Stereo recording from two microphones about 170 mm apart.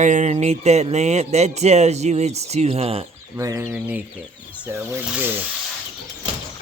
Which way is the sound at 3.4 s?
20° right (ahead or behind).